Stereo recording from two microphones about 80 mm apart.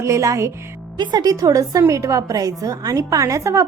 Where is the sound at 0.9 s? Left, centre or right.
Right.